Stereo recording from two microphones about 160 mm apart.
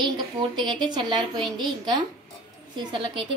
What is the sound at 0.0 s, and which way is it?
A woman's voice, 30° right (ahead or behind).